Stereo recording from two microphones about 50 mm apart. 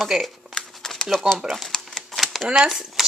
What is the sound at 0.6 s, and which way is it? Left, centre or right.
Crumpling, centre.